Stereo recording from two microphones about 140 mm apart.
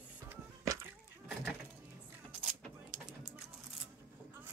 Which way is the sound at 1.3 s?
5° right (ahead or behind).